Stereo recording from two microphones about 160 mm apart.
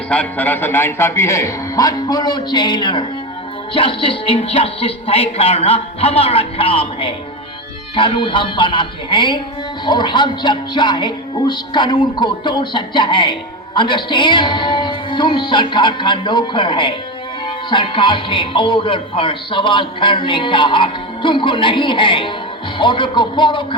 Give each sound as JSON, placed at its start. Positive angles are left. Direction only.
{"t": 0.1, "sound": "a man's voice", "side_deg": 10}